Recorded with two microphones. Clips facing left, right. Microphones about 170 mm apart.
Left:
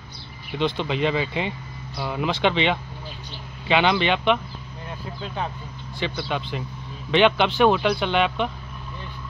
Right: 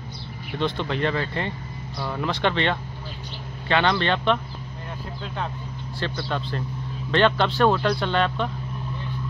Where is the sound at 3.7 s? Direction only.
5° left (ahead or behind).